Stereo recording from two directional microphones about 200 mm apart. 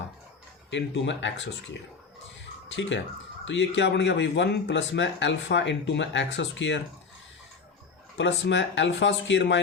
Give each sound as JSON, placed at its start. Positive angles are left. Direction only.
{"t": 0.7, "sound": "speech", "side_deg": 65}
{"t": 3.4, "sound": "speech", "side_deg": 65}
{"t": 8.2, "sound": "speech", "side_deg": 65}